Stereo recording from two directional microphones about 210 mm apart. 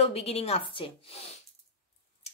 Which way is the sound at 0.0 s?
30° left (ahead or behind).